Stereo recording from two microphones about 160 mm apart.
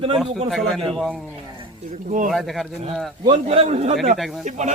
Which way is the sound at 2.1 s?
55° right (ahead or behind).